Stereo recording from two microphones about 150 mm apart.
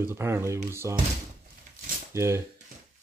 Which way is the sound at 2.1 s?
20° right (ahead or behind).